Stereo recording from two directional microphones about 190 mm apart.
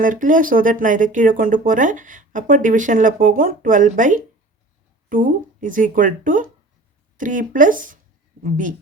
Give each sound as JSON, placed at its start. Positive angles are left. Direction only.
{"t": 0.0, "sound": "speech", "side_deg": -45}